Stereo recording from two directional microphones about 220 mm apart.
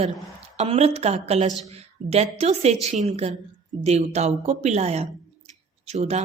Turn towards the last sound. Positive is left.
turn(degrees=-30)  # may be behind; listen again after turning